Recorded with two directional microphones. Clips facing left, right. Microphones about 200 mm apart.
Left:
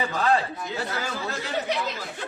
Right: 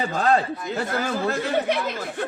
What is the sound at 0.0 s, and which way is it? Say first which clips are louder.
Speech: right 3 dB; 45° right (ahead or behind).